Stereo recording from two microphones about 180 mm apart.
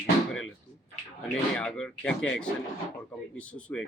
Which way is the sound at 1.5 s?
5° left (ahead or behind).